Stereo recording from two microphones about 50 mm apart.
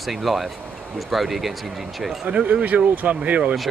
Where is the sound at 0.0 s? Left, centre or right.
Centre.